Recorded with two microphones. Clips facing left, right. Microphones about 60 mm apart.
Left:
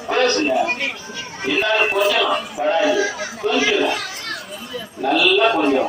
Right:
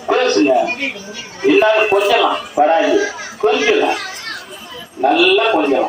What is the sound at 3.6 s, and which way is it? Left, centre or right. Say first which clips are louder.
Speech: right 3 dB; right.